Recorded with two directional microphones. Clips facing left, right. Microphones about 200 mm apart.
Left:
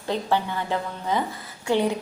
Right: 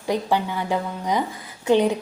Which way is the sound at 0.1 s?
15° right (ahead or behind).